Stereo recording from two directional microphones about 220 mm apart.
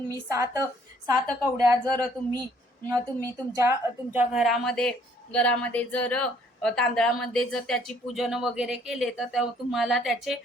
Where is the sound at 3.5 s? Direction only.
10° right (ahead or behind).